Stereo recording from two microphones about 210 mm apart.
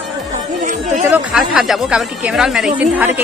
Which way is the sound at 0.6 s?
35° right (ahead or behind).